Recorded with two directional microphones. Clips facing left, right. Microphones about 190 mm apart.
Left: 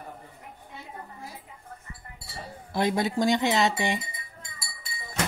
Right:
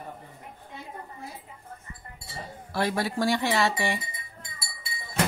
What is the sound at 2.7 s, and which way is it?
Speech, 20° left (ahead or behind).